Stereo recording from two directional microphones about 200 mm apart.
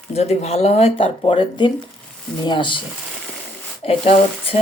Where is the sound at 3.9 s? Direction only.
30° left (ahead or behind).